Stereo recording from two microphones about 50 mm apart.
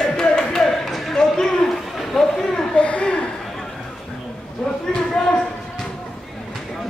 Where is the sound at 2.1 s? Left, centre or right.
Centre.